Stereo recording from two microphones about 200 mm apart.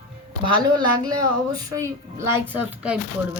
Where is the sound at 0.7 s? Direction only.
20° right (ahead or behind).